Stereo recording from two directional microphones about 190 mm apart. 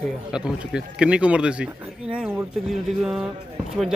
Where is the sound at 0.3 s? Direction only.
5° right (ahead or behind).